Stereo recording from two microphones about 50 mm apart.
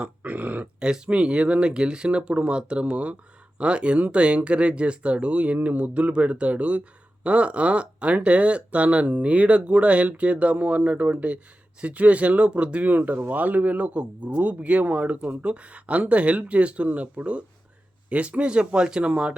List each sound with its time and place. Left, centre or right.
0.0 s speech: right
0.8 s speech: centre